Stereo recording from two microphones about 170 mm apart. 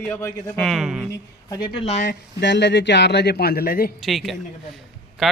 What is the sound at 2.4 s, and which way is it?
A man's voice, 90° left.